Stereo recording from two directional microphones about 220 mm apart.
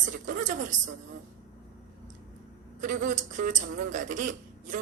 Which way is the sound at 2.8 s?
35° right (ahead or behind).